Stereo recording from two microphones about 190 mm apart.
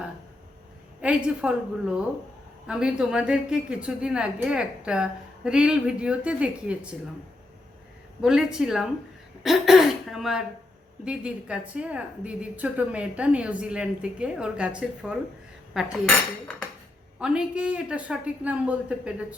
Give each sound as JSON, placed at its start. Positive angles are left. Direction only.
{"t": 1.0, "sound": "speech", "side_deg": -5}
{"t": 8.2, "sound": "speech", "side_deg": -5}